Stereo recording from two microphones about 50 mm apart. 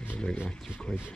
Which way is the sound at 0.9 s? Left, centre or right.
Centre.